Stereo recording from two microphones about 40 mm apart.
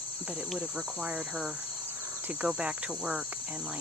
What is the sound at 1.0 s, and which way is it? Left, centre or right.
Cricket, right.